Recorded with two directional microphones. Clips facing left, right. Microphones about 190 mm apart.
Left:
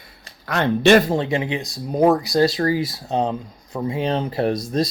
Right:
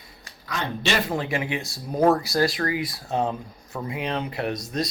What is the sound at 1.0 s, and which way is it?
Speech, 25° left (ahead or behind).